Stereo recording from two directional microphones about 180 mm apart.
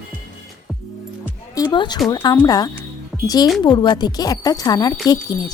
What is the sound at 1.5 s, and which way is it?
Speech, 20° left (ahead or behind).